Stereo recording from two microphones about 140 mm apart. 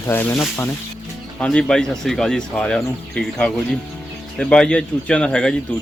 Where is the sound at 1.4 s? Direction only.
5° left (ahead or behind).